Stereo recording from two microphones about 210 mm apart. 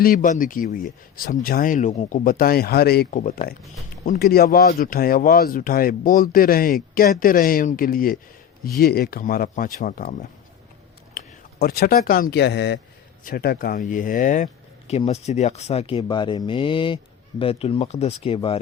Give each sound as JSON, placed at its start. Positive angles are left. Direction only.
{"t": 0.0, "sound": "speech", "side_deg": 40}
{"t": 3.1, "sound": "speech", "side_deg": 40}
{"t": 11.2, "sound": "a sound", "side_deg": 45}
{"t": 11.6, "sound": "speech", "side_deg": 45}